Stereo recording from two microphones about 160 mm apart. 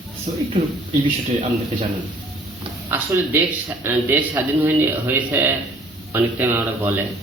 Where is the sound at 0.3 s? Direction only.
40° right (ahead or behind).